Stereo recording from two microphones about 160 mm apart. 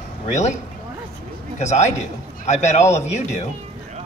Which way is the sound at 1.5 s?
45° left (ahead or behind).